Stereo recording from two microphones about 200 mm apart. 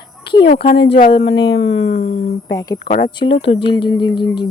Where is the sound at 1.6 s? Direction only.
80° left.